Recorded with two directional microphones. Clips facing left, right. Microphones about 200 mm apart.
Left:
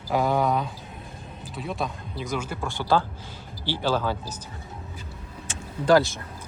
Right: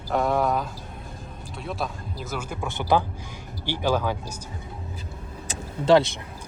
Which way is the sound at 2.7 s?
20° right (ahead or behind).